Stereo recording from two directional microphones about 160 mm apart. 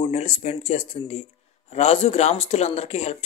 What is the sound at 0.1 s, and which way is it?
Speech, 40° left (ahead or behind).